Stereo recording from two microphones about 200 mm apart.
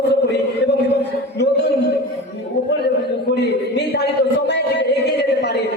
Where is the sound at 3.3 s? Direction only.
60° left (ahead or behind).